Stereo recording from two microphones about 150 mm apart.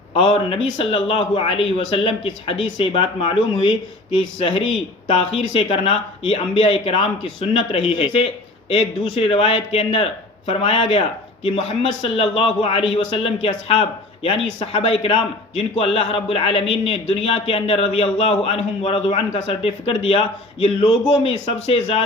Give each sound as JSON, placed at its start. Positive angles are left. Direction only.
{"t": 0.1, "sound": "a man's voice", "side_deg": 35}